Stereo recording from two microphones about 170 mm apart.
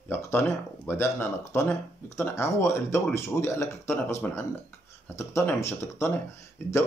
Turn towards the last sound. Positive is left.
turn(degrees=15)  # may be behind; listen again after turning